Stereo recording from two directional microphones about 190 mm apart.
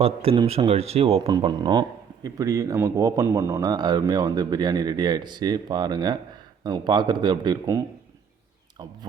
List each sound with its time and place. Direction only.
0.0 s speech: 30° right (ahead or behind)
8.8 s speech: 25° right (ahead or behind)